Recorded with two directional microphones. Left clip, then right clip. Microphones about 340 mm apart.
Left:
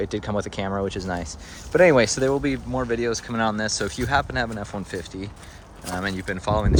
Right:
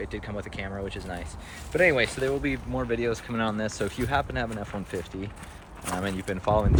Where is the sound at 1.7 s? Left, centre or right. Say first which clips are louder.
Left 6 dB; left.